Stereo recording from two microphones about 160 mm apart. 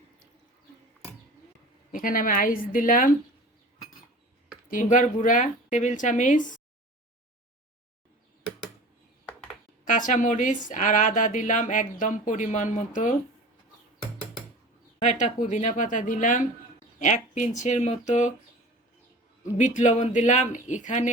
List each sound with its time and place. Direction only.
1.9 s a woman's voice: 60° left (ahead or behind)
4.7 s speech: 55° left (ahead or behind)
9.8 s speech: 55° left (ahead or behind)
15.0 s speech: 50° left (ahead or behind)
19.4 s speech: 50° left (ahead or behind)